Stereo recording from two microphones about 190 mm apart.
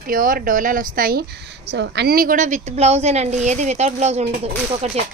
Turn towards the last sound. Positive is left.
turn(degrees=-35)  # may be behind; listen again after turning